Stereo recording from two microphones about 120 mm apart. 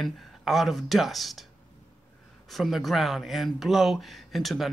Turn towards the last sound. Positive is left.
turn(degrees=0)  # may be behind; listen again after turning